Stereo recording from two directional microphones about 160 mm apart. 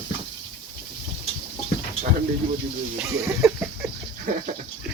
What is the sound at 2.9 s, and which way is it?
Speech, 15° right (ahead or behind).